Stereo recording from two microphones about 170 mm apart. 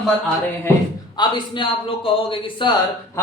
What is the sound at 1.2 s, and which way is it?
Speech, 25° left (ahead or behind).